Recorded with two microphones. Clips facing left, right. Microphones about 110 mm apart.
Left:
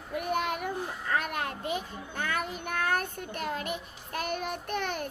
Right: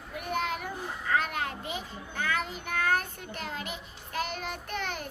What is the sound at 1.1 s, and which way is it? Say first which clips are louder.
A child's voice: right 1 dB; 50° left (ahead or behind).